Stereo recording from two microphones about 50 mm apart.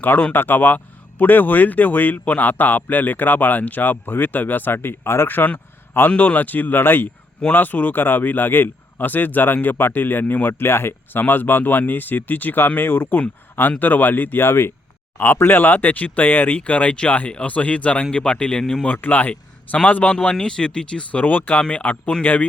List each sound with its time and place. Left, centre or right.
0.0 s speech: left
6.1 s speech: left
18.9 s a man's voice: left; by 21.2 s centre
21.2 s speech: left
21.6 s speech: left